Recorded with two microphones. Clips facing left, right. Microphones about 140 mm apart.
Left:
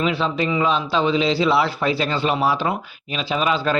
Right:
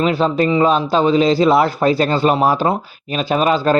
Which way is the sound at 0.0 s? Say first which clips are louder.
Right 6 dB; 45° right (ahead or behind).